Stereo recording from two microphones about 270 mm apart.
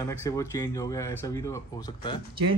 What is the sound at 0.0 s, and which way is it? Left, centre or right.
A man's voice, centre.